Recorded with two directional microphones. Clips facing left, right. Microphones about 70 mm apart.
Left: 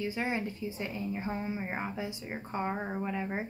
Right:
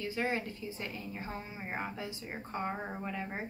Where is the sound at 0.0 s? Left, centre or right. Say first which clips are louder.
Left 2 dB; centre.